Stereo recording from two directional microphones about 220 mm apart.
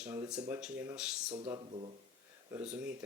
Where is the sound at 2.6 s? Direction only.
5° right (ahead or behind).